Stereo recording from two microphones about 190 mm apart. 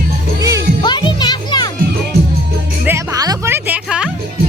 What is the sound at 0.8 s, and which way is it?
Music, 25° left (ahead or behind).